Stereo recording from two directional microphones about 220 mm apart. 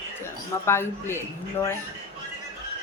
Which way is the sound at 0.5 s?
10° left (ahead or behind).